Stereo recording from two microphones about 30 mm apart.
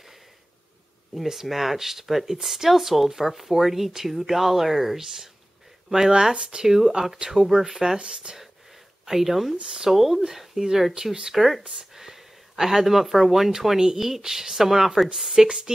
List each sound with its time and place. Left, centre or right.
1.1 s speech: centre; by 6.7 s right
6.7 s speech: centre
9.0 s speech: centre